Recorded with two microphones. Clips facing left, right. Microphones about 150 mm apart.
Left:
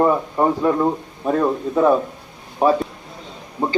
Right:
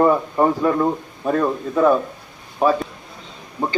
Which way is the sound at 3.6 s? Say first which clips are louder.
Left 1 dB; 25° left (ahead or behind).